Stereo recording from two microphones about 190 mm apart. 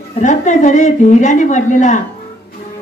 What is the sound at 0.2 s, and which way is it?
A woman's voice, 40° left (ahead or behind).